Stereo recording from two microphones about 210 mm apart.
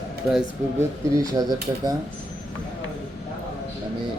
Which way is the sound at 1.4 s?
20° right (ahead or behind).